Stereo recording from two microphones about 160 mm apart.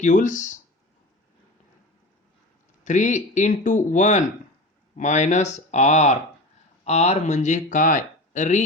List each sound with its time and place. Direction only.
0.0 s speech: 50° left (ahead or behind)
2.8 s speech: 50° left (ahead or behind)